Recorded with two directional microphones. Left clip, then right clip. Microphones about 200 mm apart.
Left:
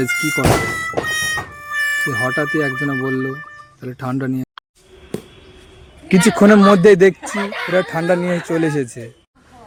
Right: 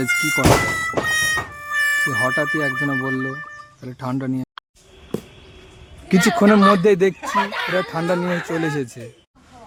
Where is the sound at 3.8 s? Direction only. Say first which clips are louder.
Left 3 dB; 10° left (ahead or behind).